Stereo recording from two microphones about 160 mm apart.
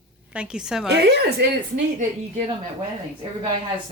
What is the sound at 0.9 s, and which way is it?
Speech, 90° right.